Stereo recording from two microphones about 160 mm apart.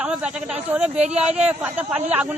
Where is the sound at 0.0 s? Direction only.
5° right (ahead or behind).